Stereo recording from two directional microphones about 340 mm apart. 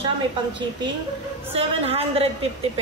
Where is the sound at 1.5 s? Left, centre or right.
Centre.